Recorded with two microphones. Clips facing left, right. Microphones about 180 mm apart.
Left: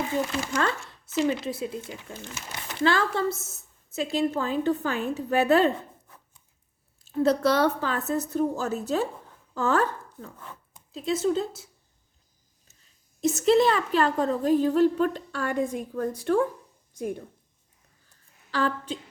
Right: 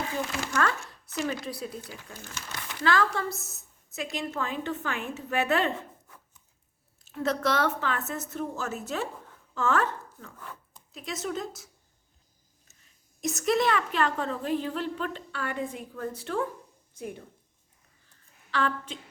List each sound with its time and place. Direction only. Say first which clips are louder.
0.5 s a woman's voice: right 2 dB; 25° left (ahead or behind)
7.0 s a woman's voice: left 6 dB; 30° left (ahead or behind)
13.2 s a woman's voice: left 6 dB; 30° left (ahead or behind)
18.5 s a woman's voice: left 2 dB; 35° left (ahead or behind)